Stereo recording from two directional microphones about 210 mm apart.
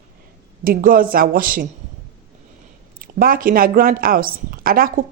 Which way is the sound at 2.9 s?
45° right (ahead or behind).